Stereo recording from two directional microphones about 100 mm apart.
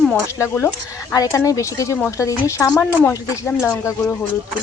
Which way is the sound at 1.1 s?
35° left (ahead or behind).